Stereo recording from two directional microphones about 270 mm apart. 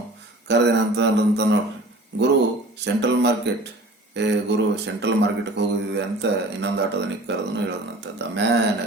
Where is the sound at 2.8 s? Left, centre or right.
Right.